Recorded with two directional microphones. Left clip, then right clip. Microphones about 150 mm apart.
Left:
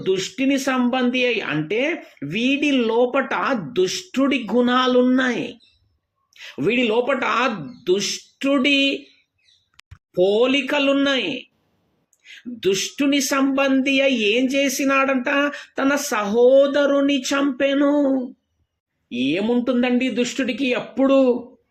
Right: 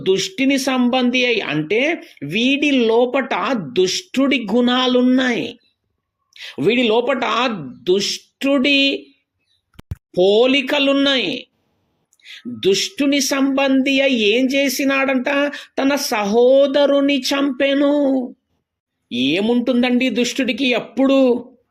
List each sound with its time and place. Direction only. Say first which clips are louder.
0.0 s speech: right 4 dB; 25° right (ahead or behind)
10.1 s speech: right 4 dB; 25° right (ahead or behind)